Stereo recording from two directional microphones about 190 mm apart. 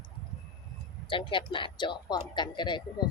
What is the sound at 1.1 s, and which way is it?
A woman's voice, 25° left (ahead or behind).